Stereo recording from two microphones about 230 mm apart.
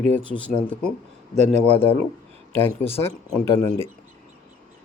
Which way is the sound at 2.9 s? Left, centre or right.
Centre.